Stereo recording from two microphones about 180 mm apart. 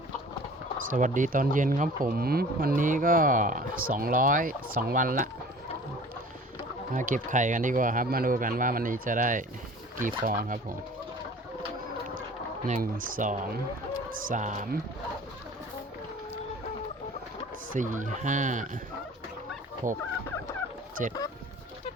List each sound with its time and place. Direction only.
0.9 s speech: 45° right (ahead or behind)
6.9 s speech: 45° right (ahead or behind)
12.6 s speech: 45° right (ahead or behind)
17.7 s speech: 45° right (ahead or behind)
19.8 s speech: 45° right (ahead or behind)
21.0 s speech: 45° right (ahead or behind)